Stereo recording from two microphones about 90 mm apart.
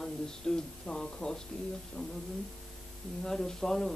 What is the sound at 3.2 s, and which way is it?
Speech, 5° left (ahead or behind).